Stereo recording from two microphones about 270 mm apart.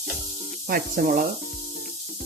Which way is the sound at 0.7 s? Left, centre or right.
Right.